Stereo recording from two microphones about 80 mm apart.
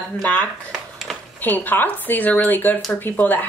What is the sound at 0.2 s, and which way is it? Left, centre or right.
Speech, centre.